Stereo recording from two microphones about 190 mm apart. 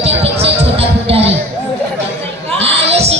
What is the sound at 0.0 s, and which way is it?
Music, 30° right (ahead or behind).